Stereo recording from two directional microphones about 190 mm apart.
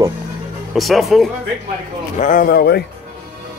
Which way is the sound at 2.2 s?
45° left (ahead or behind).